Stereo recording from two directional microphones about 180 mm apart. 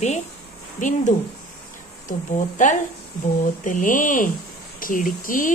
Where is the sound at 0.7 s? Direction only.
45° left (ahead or behind).